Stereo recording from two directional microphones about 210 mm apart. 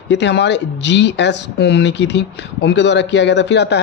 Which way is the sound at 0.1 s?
55° left (ahead or behind).